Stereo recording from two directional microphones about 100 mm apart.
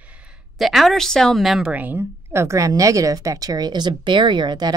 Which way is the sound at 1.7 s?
20° right (ahead or behind).